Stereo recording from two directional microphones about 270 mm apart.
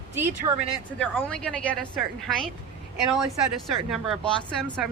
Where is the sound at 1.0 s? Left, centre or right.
Centre.